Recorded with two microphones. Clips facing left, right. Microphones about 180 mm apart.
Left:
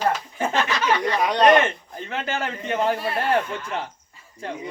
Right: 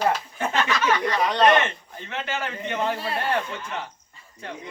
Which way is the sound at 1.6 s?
35° left (ahead or behind).